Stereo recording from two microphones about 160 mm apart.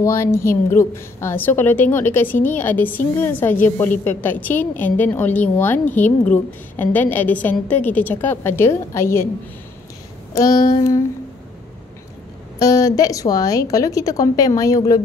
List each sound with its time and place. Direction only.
0.0 s a woman's voice: 15° left (ahead or behind)
10.3 s a woman's voice: 20° left (ahead or behind)
12.5 s a woman's voice: 20° left (ahead or behind)